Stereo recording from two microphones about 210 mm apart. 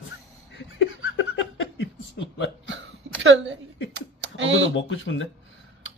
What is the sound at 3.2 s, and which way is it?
Speech, 60° right (ahead or behind).